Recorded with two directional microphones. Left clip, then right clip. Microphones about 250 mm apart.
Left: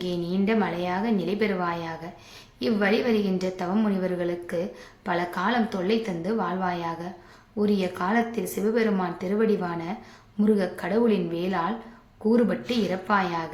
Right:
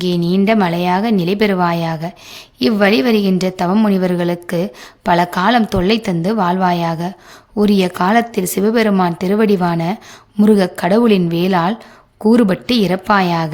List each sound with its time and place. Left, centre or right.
0.0 s a woman's voice: right